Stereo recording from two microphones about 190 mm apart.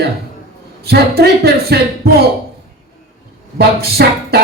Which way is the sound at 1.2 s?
60° right (ahead or behind).